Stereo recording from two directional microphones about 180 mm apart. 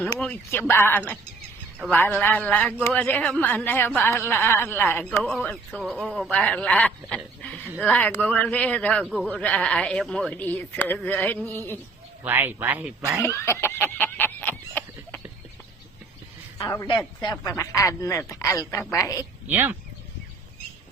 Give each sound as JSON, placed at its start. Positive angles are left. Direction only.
{"t": 0.2, "sound": "speech", "side_deg": 5}
{"t": 12.2, "sound": "speech", "side_deg": -10}
{"t": 13.2, "sound": "a sound", "side_deg": 15}
{"t": 16.6, "sound": "a man's voice", "side_deg": 25}
{"t": 19.5, "sound": "speech", "side_deg": -10}